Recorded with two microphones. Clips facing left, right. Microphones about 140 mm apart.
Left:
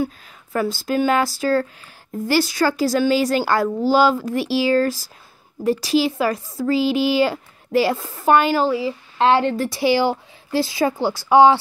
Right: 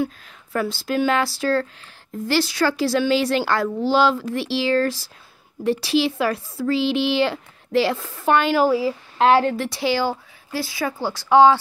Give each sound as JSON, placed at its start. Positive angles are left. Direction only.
{"t": 0.0, "sound": "a woman's voice", "side_deg": 0}
{"t": 9.8, "sound": "speech", "side_deg": 15}